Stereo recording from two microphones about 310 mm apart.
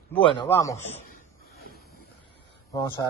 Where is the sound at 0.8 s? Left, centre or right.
Left.